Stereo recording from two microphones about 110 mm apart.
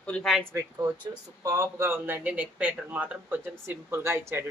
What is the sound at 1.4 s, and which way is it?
A man's voice, 25° right (ahead or behind).